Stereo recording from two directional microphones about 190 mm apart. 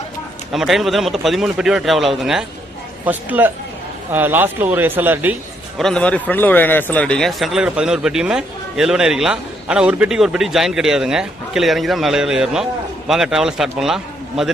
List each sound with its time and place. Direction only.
0.5 s a man's voice: centre (ahead or behind)